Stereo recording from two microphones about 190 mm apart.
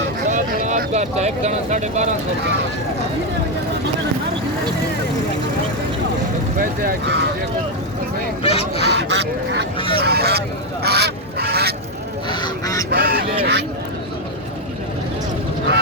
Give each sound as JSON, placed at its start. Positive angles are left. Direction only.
{"t": 0.3, "sound": "speech", "side_deg": -40}
{"t": 6.6, "sound": "speech", "side_deg": -55}
{"t": 8.4, "sound": "speech", "side_deg": 30}
{"t": 8.9, "sound": "speech", "side_deg": -65}
{"t": 10.8, "sound": "goose", "side_deg": -60}
{"t": 12.3, "sound": "goose", "side_deg": 20}
{"t": 12.9, "sound": "duck", "side_deg": -55}